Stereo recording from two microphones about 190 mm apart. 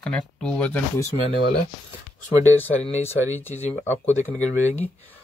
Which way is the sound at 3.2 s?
10° right (ahead or behind).